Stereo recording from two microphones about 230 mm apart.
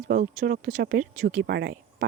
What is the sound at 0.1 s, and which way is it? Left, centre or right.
A woman's voice, right.